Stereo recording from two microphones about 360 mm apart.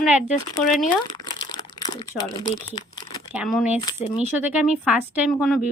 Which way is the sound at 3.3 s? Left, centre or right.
Centre.